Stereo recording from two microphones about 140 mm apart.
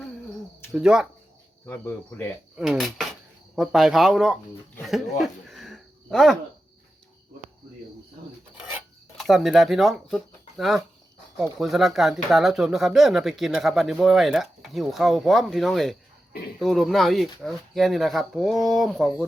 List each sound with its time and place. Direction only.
0.7 s speech: 5° right (ahead or behind)
1.6 s speech: 15° left (ahead or behind)
2.6 s speech: centre (ahead or behind)
4.9 s a sound: centre (ahead or behind)
9.1 s speech: centre (ahead or behind)